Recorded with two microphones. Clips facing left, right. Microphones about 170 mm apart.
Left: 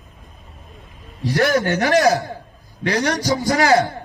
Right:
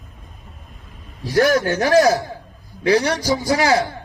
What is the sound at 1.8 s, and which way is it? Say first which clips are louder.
Speech: right 2 dB; 40° right (ahead or behind).